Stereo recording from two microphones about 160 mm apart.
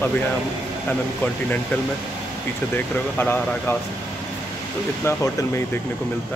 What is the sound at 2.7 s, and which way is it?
Speech, 15° left (ahead or behind).